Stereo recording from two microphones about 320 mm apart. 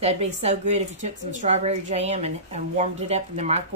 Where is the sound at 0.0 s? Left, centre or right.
Centre.